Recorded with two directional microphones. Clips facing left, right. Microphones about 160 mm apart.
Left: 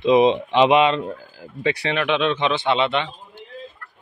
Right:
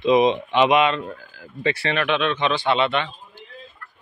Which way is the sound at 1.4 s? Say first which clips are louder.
Left 1 dB; 15° left (ahead or behind).